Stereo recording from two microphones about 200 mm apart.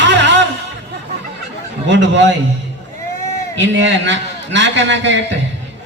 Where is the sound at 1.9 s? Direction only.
65° right (ahead or behind).